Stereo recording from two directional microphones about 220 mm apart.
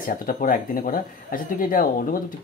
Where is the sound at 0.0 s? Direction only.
40° left (ahead or behind).